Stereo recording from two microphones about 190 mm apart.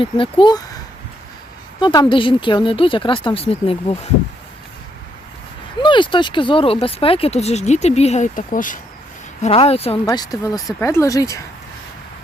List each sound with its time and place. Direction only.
0.0 s speech: 25° left (ahead or behind)
1.8 s speech: 25° left (ahead or behind)
5.8 s speech: 25° left (ahead or behind); by 8.8 s 45° left (ahead or behind)
9.4 s speech: 30° left (ahead or behind)
10.1 s speech: 20° left (ahead or behind)